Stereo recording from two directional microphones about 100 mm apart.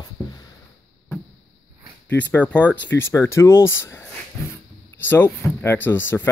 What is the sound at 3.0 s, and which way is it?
Speech, 25° left (ahead or behind).